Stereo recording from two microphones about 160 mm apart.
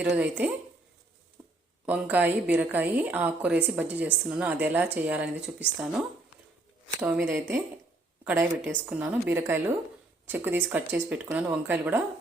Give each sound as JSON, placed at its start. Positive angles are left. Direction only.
{"t": 0.0, "sound": "a woman's voice", "side_deg": -10}
{"t": 1.9, "sound": "a woman's voice", "side_deg": -10}